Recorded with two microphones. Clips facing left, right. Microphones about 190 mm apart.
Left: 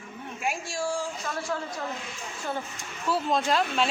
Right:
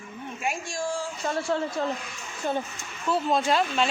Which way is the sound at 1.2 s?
30° right (ahead or behind).